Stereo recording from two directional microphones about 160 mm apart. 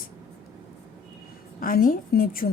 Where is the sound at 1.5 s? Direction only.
60° left (ahead or behind).